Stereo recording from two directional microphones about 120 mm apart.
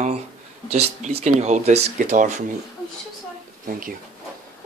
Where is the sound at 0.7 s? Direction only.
60° right (ahead or behind); by 2.3 s 85° right.